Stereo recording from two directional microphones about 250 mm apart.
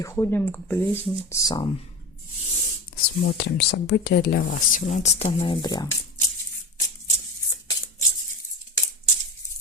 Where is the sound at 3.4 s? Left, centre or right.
Left; by 5.9 s centre.